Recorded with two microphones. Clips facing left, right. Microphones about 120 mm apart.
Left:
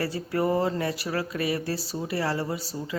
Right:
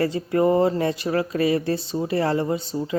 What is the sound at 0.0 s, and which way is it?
Speech, 25° right (ahead or behind).